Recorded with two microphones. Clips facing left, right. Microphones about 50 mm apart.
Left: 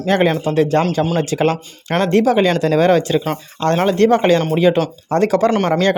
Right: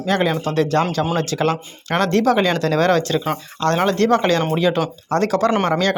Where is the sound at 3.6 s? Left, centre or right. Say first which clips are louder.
Left 3 dB; left.